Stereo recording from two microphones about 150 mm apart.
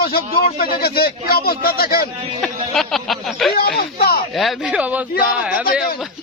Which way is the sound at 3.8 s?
90° left.